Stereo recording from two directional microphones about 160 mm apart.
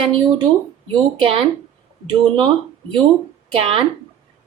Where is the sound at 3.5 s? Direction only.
35° right (ahead or behind).